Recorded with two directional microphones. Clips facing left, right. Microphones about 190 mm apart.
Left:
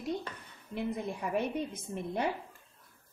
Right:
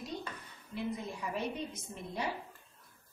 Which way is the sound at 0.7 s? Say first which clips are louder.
Left 3 dB; 55° left (ahead or behind).